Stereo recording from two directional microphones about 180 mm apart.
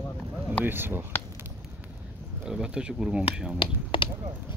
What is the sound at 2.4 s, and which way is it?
Speech, 5° right (ahead or behind).